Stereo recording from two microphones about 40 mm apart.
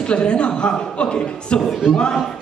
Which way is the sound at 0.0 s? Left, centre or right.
Left.